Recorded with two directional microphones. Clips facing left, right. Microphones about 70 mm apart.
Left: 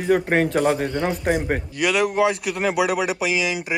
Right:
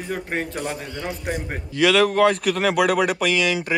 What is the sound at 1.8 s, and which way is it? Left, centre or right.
Speech, centre.